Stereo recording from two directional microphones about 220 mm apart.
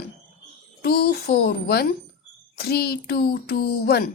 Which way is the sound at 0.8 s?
45° left (ahead or behind).